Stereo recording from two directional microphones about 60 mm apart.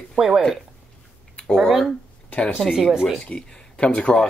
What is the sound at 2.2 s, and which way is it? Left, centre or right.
Speech, left.